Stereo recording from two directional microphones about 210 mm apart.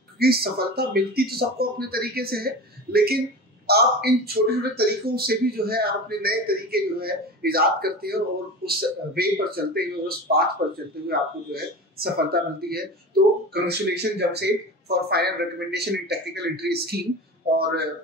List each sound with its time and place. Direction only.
0.2 s speech: 45° right (ahead or behind)